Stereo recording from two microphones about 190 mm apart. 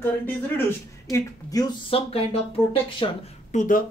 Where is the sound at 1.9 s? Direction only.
30° left (ahead or behind).